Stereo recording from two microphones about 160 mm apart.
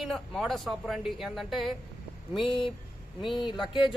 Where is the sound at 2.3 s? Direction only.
30° left (ahead or behind).